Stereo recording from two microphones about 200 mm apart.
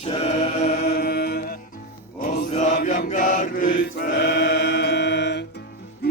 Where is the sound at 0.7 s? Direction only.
50° left (ahead or behind).